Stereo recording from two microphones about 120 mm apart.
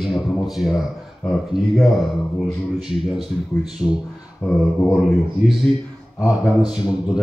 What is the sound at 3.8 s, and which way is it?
Speech, 25° left (ahead or behind).